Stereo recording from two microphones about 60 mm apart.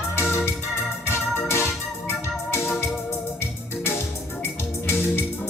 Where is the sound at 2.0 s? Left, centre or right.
Left.